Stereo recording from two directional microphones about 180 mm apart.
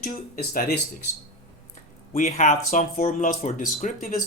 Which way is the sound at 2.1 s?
45° left (ahead or behind).